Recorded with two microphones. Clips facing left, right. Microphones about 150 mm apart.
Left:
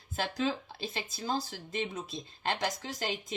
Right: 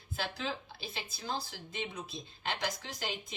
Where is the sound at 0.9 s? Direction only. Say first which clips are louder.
Left 5 dB; 45° left (ahead or behind).